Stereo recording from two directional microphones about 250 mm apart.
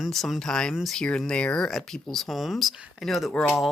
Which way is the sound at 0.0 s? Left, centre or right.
Centre.